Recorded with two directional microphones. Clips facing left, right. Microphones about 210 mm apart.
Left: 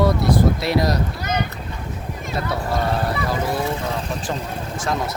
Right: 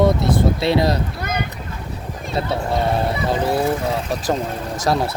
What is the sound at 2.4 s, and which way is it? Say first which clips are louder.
Speech: right 3 dB; 25° right (ahead or behind).